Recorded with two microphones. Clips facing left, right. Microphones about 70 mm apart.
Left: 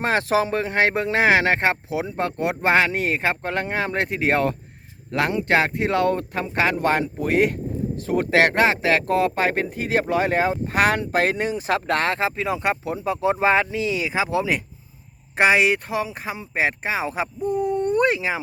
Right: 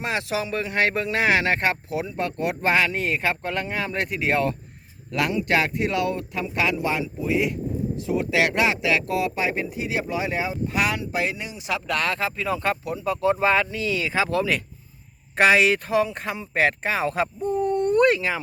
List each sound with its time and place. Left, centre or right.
0.0 s speech: left; by 18.3 s centre